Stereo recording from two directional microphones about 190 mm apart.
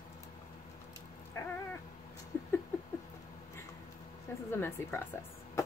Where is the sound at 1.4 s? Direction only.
15° left (ahead or behind).